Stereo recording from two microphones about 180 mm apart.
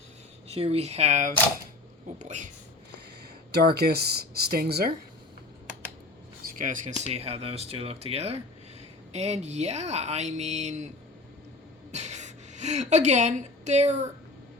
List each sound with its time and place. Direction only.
0.4 s speech: 35° right (ahead or behind)
3.5 s speech: 60° right (ahead or behind)
6.4 s speech: 50° right (ahead or behind)
7.0 s speech: 35° right (ahead or behind)
11.9 s a woman's voice: 40° right (ahead or behind)